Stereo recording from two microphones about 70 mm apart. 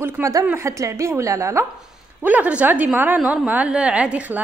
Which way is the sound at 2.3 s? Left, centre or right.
Right.